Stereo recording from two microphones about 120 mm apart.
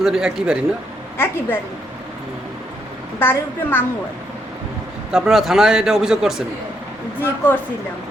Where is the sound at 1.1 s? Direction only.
20° left (ahead or behind).